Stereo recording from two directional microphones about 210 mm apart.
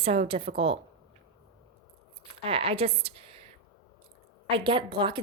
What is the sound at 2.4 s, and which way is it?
A woman's voice, 25° right (ahead or behind).